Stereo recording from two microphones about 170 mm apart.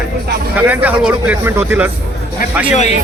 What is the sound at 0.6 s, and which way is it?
A man's voice, 10° right (ahead or behind).